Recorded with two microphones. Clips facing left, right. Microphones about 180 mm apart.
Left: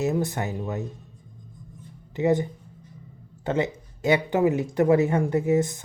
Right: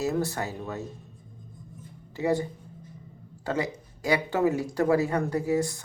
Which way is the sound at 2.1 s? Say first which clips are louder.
Left 4 dB; 20° left (ahead or behind).